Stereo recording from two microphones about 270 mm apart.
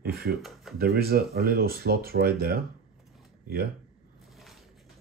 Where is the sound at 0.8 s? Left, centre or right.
Right.